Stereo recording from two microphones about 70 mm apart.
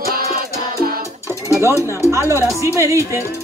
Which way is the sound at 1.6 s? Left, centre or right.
Right.